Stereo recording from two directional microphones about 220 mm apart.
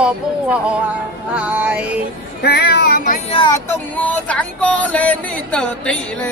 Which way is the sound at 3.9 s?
5° left (ahead or behind).